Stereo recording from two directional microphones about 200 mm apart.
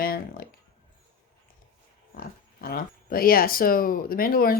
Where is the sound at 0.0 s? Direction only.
45° left (ahead or behind).